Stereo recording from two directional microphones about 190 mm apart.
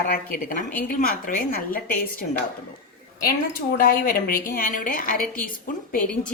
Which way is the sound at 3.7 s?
50° left (ahead or behind).